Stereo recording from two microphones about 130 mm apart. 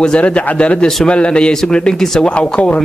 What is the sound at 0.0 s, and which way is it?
A man's voice, 10° left (ahead or behind).